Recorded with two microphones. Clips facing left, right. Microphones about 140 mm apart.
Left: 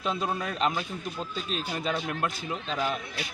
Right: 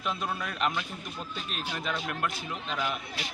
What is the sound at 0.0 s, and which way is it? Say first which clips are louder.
A man's voice: left 3 dB; 30° left (ahead or behind).